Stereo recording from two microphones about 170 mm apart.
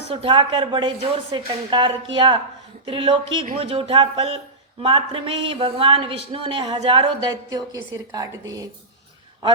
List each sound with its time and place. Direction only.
0.1 s speech: 30° right (ahead or behind)